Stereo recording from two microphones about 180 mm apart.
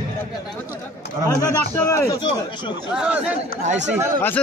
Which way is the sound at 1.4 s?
20° left (ahead or behind).